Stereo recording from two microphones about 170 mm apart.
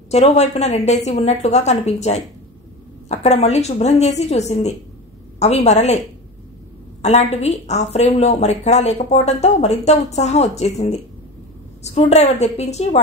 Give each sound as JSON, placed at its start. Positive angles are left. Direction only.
{"t": 0.1, "sound": "a woman's voice", "side_deg": 40}
{"t": 7.0, "sound": "a woman's voice", "side_deg": 40}